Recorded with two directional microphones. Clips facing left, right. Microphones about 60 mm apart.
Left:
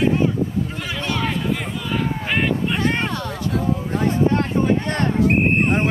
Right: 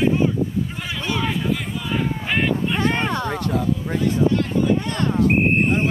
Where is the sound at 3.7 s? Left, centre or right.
Left.